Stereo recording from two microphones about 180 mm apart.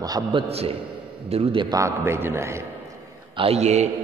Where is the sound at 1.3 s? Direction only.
35° right (ahead or behind).